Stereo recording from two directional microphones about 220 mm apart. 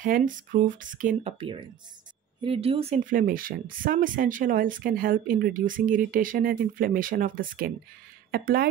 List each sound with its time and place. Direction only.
0.0 s speech: 40° right (ahead or behind)
1.4 s speech: 20° right (ahead or behind); by 8.6 s 45° right (ahead or behind)